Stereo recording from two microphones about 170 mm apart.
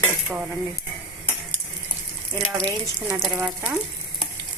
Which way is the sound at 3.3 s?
5° right (ahead or behind).